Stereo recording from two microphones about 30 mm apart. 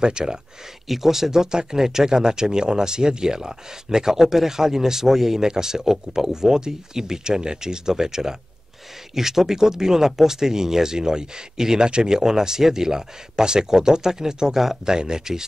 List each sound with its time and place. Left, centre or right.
0.0 s speech: right
0.8 s speech: centre
14.9 s speech: right